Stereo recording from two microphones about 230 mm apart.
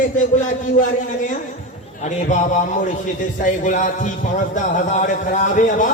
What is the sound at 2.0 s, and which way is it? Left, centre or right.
A man's voice, left.